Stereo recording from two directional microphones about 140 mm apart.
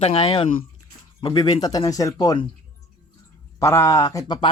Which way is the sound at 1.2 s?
30° left (ahead or behind).